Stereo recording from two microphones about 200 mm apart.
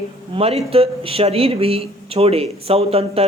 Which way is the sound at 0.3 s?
30° right (ahead or behind).